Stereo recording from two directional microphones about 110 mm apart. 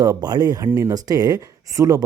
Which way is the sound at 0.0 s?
35° right (ahead or behind).